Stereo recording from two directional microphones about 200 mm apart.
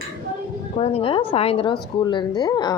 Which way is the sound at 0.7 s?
30° left (ahead or behind).